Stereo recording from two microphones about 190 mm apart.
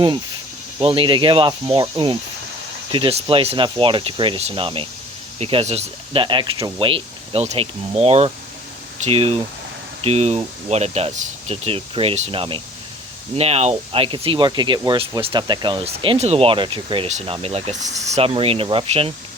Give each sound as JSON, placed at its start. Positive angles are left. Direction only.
{"t": 0.8, "sound": "speech", "side_deg": -25}